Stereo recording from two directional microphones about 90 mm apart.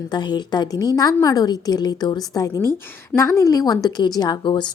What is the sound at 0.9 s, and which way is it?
A woman's voice, 40° left (ahead or behind).